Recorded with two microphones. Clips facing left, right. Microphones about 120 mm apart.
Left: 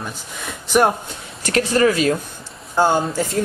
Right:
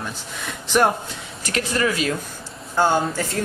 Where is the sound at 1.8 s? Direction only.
35° left (ahead or behind).